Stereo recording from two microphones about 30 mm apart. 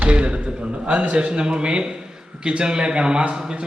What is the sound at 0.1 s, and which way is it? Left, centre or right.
A man's voice, right.